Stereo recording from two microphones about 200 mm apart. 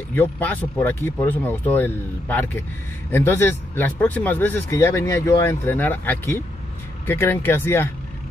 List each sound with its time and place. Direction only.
0.1 s speech: 10° left (ahead or behind)